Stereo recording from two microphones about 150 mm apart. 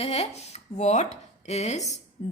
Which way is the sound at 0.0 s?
45° left (ahead or behind).